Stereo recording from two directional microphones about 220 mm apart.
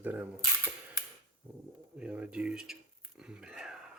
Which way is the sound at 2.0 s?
5° right (ahead or behind).